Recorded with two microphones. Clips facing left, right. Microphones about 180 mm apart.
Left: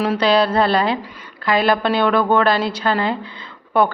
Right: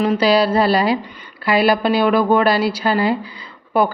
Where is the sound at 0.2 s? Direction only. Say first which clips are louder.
Left 1 dB; 5° right (ahead or behind).